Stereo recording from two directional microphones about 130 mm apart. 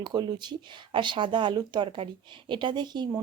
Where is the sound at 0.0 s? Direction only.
30° right (ahead or behind).